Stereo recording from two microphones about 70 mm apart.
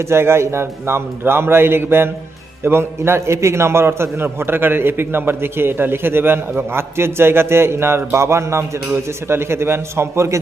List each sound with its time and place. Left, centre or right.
0.0 s a man's voice: right